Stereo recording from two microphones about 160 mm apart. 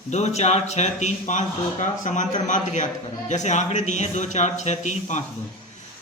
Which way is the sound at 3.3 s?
45° left (ahead or behind).